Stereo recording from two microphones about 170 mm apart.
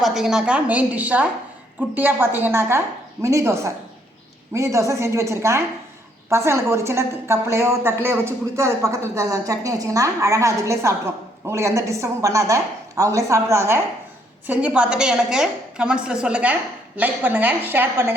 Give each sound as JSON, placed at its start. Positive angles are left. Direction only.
{"t": 0.0, "sound": "a woman's voice", "side_deg": 0}